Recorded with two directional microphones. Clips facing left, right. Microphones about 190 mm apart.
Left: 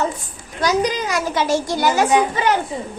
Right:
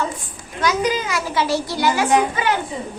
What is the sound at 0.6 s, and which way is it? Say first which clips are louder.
A child's voice: left 1 dB; 35° left (ahead or behind).